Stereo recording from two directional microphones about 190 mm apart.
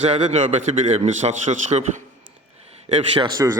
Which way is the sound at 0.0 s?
35° right (ahead or behind).